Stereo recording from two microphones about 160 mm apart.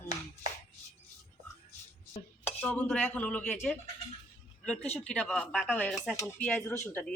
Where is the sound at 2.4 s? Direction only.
10° left (ahead or behind).